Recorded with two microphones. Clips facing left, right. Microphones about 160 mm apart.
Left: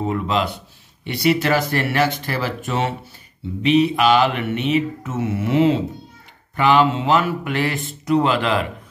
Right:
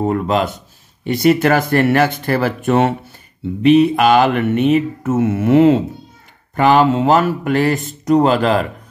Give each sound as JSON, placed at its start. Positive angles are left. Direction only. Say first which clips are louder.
{"t": 0.0, "sound": "mantra", "louder": "right 5 dB", "side_deg": -50}